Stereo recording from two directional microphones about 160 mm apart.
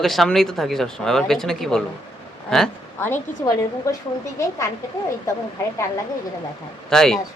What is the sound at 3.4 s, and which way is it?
Speech, 20° left (ahead or behind).